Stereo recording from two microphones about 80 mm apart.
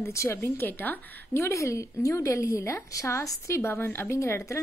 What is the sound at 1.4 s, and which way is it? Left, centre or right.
A woman's voice, left.